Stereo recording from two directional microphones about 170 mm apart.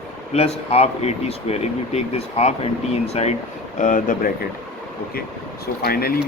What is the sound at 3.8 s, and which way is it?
Speech, 50° left (ahead or behind).